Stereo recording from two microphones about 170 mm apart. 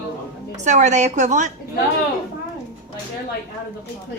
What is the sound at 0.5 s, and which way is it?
Speech, 45° right (ahead or behind).